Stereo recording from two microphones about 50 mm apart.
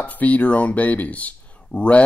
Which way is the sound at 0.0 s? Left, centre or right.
Left.